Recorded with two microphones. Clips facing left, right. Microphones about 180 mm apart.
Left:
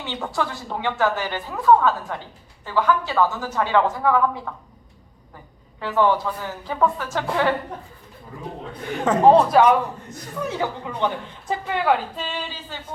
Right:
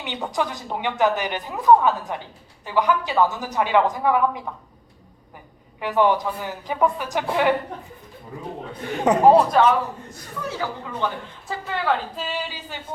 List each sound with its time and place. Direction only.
0.0 s a woman's voice: 15° right (ahead or behind)
5.8 s a woman's voice: 15° right (ahead or behind)
9.0 s a woman's voice: 10° right (ahead or behind)
9.5 s a man's voice: 10° left (ahead or behind)
12.1 s a woman's voice: 5° right (ahead or behind)